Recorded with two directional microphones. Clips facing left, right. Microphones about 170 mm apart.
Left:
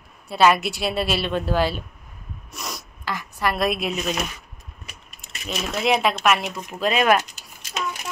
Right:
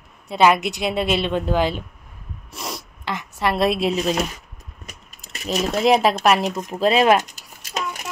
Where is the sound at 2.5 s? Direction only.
30° right (ahead or behind).